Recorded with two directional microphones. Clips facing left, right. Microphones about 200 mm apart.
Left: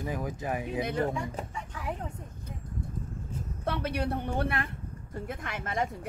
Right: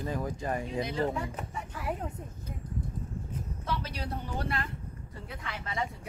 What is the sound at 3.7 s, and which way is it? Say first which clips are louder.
A woman's voice: left 6 dB; 60° left (ahead or behind).